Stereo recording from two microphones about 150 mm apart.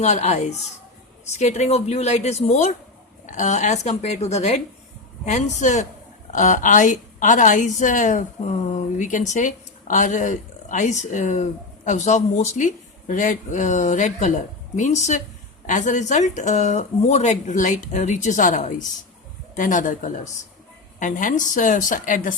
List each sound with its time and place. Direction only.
0.0 s a woman's voice: 50° left (ahead or behind)